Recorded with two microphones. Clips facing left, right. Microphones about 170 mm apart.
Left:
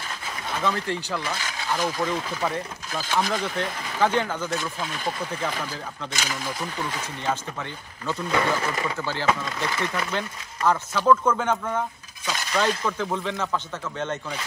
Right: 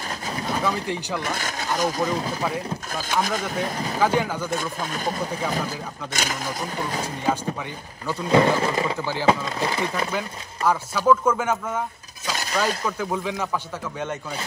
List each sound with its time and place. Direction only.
0.7 s speech: 15° right (ahead or behind)
1.2 s speech: 50° right (ahead or behind)
4.0 s speech: 10° right (ahead or behind)
4.6 s speech: 45° right (ahead or behind)
8.3 s speech: 30° right (ahead or behind)
10.1 s speech: 10° right (ahead or behind)
12.3 s speech: 40° right (ahead or behind)
12.5 s speech: 10° right (ahead or behind)